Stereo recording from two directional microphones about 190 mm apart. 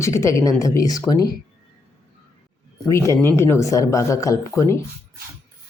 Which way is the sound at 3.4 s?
15° left (ahead or behind).